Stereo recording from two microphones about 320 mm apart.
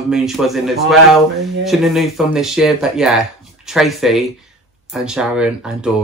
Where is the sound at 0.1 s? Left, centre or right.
Centre.